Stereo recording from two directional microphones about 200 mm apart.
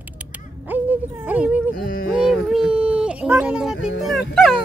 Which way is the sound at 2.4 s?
5° right (ahead or behind).